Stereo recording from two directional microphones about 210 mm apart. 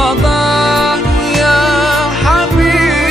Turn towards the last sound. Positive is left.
turn(degrees=0)  # may be behind; listen again after turning